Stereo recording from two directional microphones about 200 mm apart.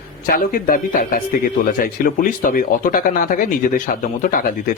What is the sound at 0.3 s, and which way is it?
Speech, 45° left (ahead or behind).